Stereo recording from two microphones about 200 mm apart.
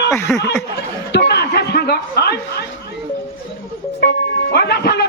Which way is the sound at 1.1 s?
55° left (ahead or behind).